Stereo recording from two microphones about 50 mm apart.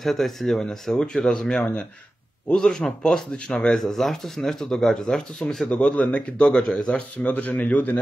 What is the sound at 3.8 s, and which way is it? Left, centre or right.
Speech, centre.